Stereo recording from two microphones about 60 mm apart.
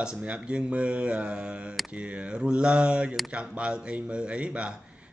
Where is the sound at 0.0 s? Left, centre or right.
Centre.